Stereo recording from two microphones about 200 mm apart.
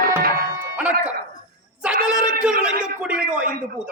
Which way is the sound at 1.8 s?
5° right (ahead or behind).